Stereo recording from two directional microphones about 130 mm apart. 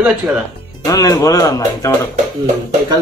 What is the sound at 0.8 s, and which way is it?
Speech, 25° left (ahead or behind).